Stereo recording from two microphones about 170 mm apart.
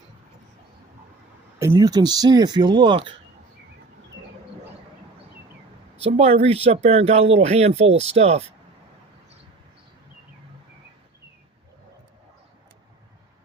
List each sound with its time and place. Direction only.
1.5 s speech: 15° right (ahead or behind)
6.1 s speech: 40° right (ahead or behind)